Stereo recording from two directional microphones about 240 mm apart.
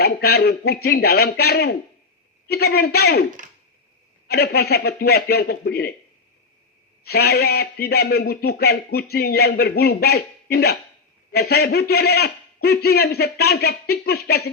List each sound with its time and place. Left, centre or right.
0.0 s a man's voice: left
4.3 s a man's voice: left
7.0 s a man's voice: left